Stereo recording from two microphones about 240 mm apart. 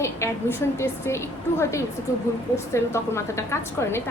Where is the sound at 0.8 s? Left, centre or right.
Centre.